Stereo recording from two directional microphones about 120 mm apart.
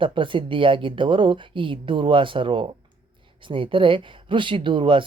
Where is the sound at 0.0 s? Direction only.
45° right (ahead or behind).